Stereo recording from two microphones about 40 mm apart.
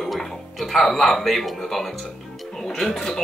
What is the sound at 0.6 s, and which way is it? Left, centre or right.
Speech, centre.